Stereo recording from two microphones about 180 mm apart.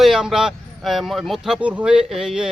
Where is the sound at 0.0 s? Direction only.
Centre (ahead or behind).